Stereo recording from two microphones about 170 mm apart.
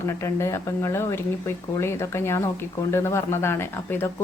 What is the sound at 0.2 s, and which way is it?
A woman's voice, 15° left (ahead or behind).